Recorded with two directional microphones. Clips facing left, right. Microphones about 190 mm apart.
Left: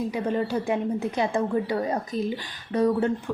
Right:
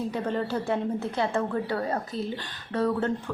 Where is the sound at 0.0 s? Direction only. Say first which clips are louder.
Left 3 dB; 10° left (ahead or behind).